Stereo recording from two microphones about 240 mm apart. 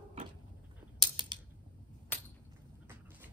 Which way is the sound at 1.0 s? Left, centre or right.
Centre.